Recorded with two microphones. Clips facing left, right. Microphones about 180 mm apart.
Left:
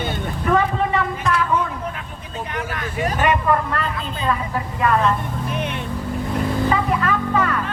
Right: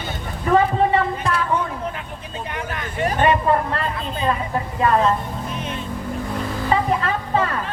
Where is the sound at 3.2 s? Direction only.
30° right (ahead or behind).